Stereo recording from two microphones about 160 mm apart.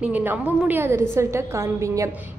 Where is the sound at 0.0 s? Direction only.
10° right (ahead or behind).